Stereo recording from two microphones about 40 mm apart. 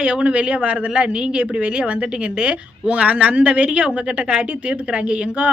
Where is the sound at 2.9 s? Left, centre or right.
Right.